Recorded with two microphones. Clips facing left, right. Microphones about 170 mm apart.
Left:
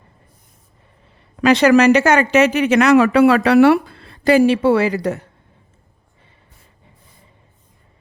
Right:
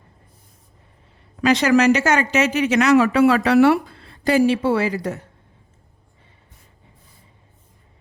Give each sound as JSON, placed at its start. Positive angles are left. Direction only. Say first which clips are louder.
{"t": 1.4, "sound": "speech", "louder": "left 4 dB", "side_deg": 65}